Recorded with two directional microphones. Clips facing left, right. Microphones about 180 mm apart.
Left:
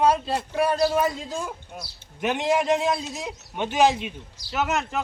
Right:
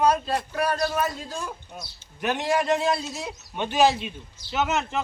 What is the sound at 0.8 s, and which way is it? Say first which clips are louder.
Speech: left 4 dB; 10° left (ahead or behind).